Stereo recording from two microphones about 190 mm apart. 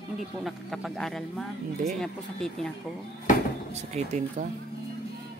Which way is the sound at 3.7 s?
35° right (ahead or behind).